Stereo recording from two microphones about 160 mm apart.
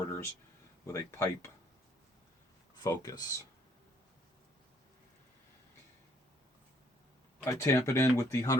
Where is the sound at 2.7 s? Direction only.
25° left (ahead or behind).